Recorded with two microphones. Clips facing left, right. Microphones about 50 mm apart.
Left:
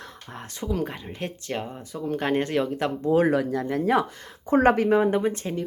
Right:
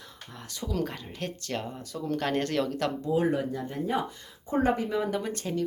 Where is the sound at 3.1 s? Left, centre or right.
Left.